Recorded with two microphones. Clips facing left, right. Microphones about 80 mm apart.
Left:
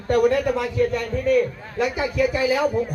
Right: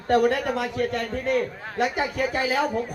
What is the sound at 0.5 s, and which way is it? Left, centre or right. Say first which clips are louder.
A man's voice: left 4 dB; right.